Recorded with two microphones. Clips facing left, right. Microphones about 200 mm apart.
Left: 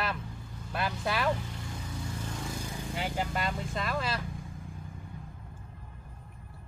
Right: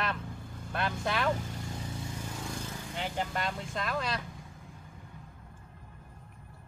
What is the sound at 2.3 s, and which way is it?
Speech, centre (ahead or behind).